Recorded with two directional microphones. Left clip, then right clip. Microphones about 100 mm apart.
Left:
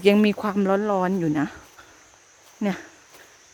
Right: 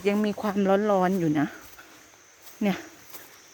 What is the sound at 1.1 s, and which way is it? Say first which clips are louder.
Speech: left 1 dB; 15° left (ahead or behind).